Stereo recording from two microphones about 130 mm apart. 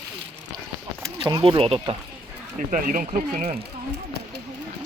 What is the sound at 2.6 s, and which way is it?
Speech, 90° right.